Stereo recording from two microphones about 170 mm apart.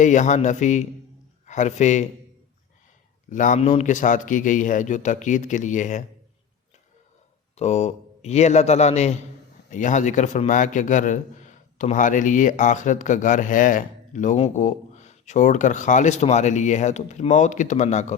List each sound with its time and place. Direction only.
0.0 s a man's voice: 45° left (ahead or behind)
3.2 s a man's voice: 50° left (ahead or behind)
7.5 s a man's voice: 40° left (ahead or behind)